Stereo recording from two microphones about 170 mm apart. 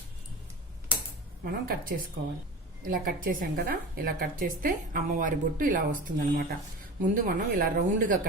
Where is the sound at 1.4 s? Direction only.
55° right (ahead or behind).